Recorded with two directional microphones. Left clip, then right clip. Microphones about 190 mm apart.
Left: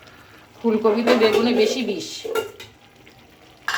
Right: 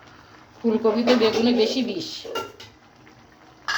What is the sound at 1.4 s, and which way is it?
Speech, 15° left (ahead or behind).